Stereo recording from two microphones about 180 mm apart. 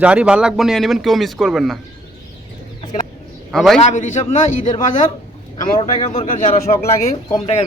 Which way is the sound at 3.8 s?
45° left (ahead or behind).